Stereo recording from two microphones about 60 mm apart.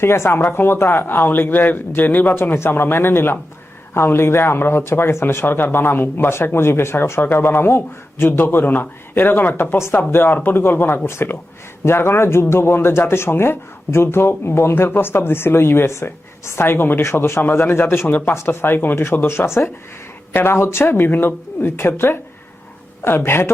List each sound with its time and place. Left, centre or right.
0.0 s speech: left
17.0 s speech: left